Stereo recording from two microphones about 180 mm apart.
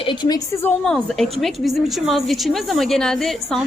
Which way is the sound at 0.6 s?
5° left (ahead or behind).